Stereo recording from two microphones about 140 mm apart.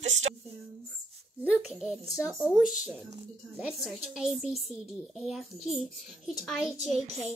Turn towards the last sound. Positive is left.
turn(degrees=0)  # may be behind; listen again after turning